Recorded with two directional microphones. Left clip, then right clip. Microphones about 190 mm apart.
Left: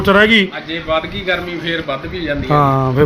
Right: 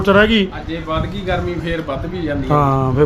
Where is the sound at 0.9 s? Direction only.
65° right (ahead or behind).